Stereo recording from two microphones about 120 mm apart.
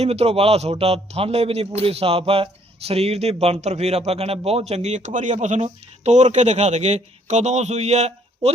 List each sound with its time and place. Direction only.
0.0 s a man's voice: 60° right (ahead or behind)